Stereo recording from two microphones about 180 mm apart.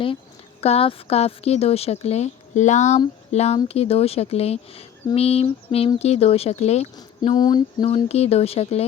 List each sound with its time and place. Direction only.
0.6 s a woman's voice: 35° left (ahead or behind)
6.9 s a woman's voice: 25° left (ahead or behind)